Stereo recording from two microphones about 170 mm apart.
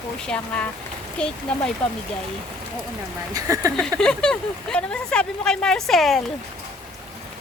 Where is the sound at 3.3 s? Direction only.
20° right (ahead or behind).